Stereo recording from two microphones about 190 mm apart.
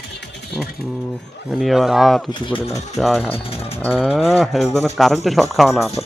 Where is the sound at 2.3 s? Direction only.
25° left (ahead or behind).